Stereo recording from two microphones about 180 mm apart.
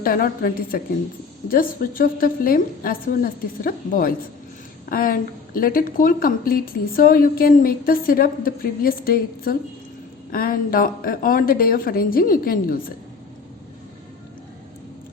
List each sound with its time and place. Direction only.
0.0 s a woman's voice: 55° left (ahead or behind)